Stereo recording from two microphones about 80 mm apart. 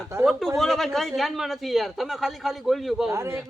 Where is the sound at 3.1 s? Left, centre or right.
Right.